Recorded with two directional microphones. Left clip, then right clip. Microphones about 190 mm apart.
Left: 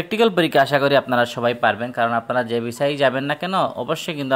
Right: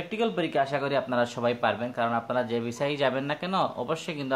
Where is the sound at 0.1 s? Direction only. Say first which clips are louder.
Left 11 dB; 55° left (ahead or behind).